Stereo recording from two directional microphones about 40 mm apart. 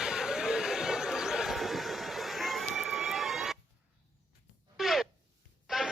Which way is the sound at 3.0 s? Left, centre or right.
Centre.